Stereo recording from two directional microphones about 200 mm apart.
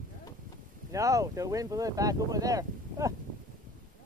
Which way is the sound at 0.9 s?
15° right (ahead or behind).